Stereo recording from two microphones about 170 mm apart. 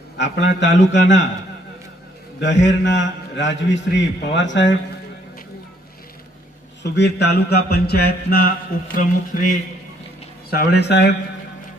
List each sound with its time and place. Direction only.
0.2 s a man's voice: 90° left
2.4 s a man's voice: 90° left
6.8 s mantra: 90° left; by 8.5 s 60° left (ahead or behind)
9.0 s speech: 50° left (ahead or behind)
10.5 s speech: 70° left (ahead or behind); by 11.1 s 85° left